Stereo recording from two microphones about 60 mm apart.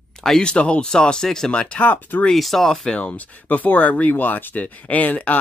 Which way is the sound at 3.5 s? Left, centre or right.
Left.